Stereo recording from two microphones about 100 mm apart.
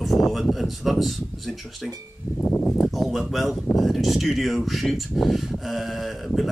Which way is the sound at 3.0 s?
Centre (ahead or behind).